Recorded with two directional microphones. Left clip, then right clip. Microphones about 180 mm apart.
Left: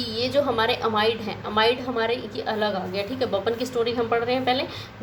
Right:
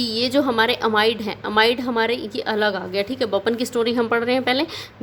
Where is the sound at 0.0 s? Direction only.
55° right (ahead or behind).